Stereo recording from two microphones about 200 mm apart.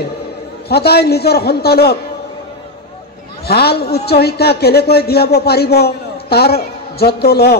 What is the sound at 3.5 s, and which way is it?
Speech, 50° left (ahead or behind).